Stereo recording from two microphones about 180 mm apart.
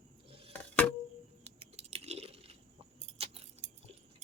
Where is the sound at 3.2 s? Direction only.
35° right (ahead or behind).